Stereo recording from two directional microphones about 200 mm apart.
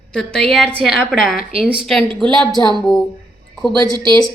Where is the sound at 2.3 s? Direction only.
20° right (ahead or behind).